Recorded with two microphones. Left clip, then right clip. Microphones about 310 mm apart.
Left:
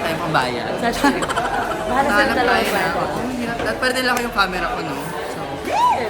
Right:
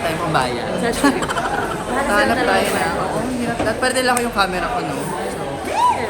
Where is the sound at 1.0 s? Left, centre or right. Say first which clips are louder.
Even; centre.